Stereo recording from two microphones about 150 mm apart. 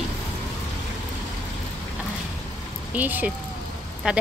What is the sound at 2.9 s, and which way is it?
Speech, 10° right (ahead or behind).